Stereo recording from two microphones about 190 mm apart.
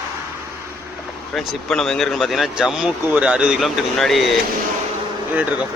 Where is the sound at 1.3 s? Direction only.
Centre (ahead or behind).